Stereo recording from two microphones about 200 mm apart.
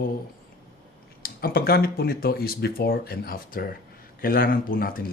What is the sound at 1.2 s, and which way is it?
Speech, 50° left (ahead or behind).